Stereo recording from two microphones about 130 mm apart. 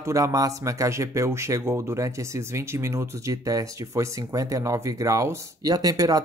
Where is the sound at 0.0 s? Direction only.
25° right (ahead or behind).